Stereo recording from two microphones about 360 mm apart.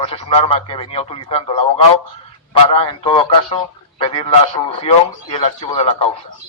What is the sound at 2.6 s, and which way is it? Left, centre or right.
A man's voice, centre.